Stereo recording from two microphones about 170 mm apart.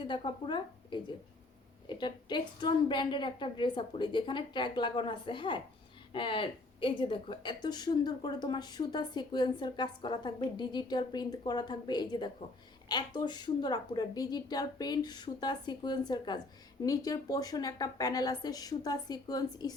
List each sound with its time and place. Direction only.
0.0 s a woman's voice: 30° left (ahead or behind)